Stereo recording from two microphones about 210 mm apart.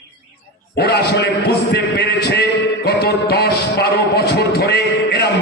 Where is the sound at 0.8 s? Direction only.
50° left (ahead or behind).